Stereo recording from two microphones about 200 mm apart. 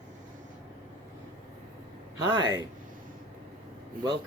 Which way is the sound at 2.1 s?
20° right (ahead or behind).